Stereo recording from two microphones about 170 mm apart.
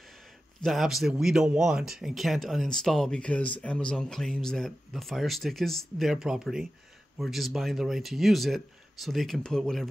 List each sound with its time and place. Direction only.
0.7 s speech: centre (ahead or behind)